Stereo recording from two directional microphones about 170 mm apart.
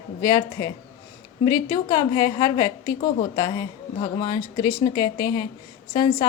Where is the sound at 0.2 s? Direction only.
20° left (ahead or behind).